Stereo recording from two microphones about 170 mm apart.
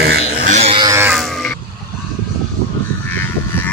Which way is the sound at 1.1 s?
Centre (ahead or behind).